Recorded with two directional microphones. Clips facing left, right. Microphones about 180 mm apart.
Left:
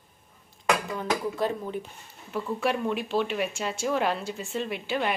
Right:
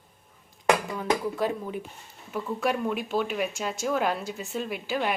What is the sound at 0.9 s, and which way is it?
Speech, 10° right (ahead or behind).